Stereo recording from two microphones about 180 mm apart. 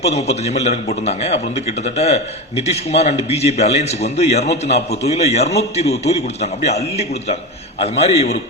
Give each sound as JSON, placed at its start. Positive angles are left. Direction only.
{"t": 0.0, "sound": "a man's voice", "side_deg": 35}